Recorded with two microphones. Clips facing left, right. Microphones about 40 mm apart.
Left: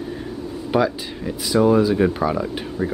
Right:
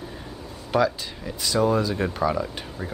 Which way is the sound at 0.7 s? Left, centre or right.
Centre.